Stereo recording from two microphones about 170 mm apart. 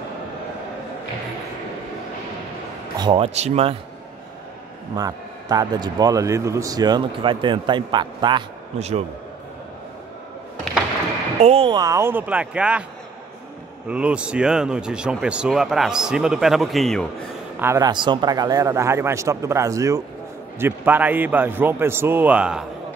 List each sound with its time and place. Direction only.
3.0 s speech: 30° right (ahead or behind)
4.9 s a man's voice: 20° right (ahead or behind)
8.7 s speech: 40° right (ahead or behind)
11.3 s a man's voice: 35° right (ahead or behind); by 12.8 s 5° right (ahead or behind)
13.8 s a man's voice: 5° right (ahead or behind)
17.6 s a man's voice: 15° right (ahead or behind)